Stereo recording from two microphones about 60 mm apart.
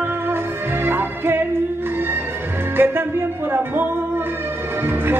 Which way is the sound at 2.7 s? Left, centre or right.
Right.